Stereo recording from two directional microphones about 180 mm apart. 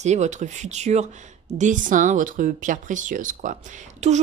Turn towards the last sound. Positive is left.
turn(degrees=-40)  # may be behind; listen again after turning